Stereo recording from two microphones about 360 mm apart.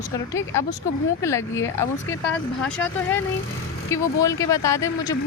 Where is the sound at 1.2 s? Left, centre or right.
Centre.